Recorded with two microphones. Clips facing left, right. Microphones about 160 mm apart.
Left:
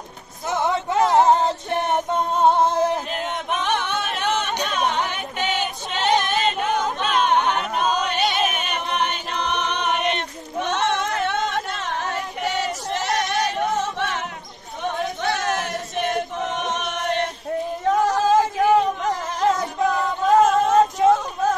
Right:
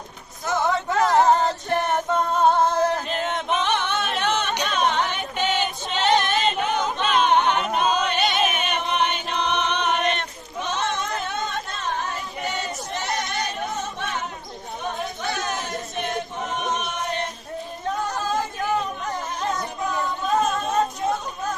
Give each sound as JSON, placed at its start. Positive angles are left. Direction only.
{"t": 0.5, "sound": "male singing", "side_deg": 25}
{"t": 3.1, "sound": "a capella", "side_deg": 5}
{"t": 9.3, "sound": "choir", "side_deg": 5}
{"t": 10.6, "sound": "a sound", "side_deg": 70}
{"t": 16.5, "sound": "choir", "side_deg": 90}
{"t": 18.0, "sound": "music", "side_deg": 90}
{"t": 20.2, "sound": "a sound", "side_deg": 90}